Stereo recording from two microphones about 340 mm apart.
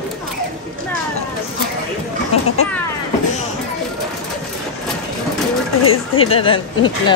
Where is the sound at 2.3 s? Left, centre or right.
Centre.